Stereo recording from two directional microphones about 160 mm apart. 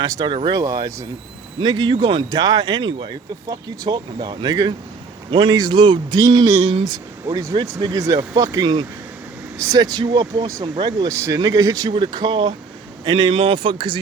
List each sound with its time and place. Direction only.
0.0 s speech: 25° right (ahead or behind)
6.6 s speech: 35° right (ahead or behind)
6.8 s speech: 25° right (ahead or behind)